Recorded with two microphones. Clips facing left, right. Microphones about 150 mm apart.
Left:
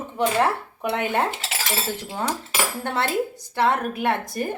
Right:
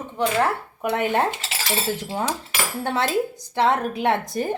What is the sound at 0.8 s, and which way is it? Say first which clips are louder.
Speech: right 2 dB; 15° right (ahead or behind).